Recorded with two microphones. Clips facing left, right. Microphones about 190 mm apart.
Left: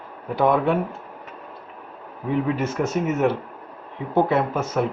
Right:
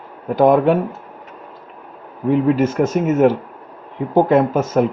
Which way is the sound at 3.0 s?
50° right (ahead or behind).